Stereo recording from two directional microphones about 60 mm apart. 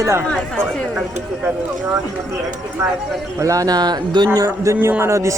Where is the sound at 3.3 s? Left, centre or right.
Right.